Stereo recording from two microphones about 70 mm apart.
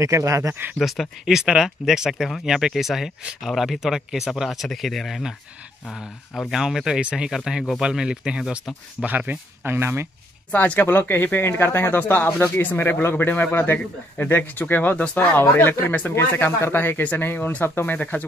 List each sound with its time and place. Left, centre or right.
0.0 s speech: right
0.7 s speech: centre
6.5 s speech: centre
9.0 s speech: right
10.5 s a man's voice: left
17.6 s speech: left
17.9 s a man's voice: left